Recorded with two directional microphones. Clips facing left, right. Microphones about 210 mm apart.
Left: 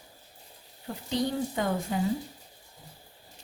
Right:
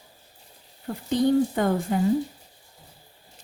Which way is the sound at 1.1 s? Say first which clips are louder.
Right 9 dB; 55° right (ahead or behind).